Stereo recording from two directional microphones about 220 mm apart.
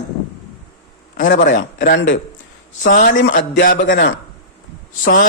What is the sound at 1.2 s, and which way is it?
Speech, 35° left (ahead or behind).